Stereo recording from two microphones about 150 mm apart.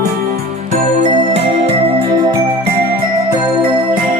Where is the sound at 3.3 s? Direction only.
30° right (ahead or behind).